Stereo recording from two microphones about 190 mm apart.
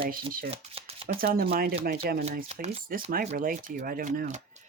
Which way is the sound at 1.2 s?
50° right (ahead or behind).